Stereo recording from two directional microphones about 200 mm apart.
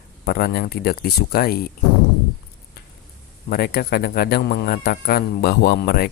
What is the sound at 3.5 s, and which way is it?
Speech, 50° left (ahead or behind).